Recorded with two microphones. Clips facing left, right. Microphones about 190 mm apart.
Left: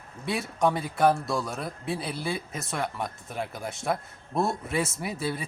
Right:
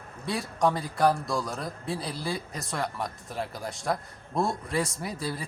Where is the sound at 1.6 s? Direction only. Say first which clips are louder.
Left 1 dB; 25° left (ahead or behind).